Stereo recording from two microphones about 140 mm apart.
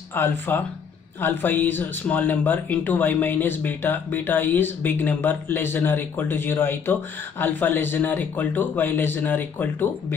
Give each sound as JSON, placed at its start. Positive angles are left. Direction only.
{"t": 0.1, "sound": "speech", "side_deg": 15}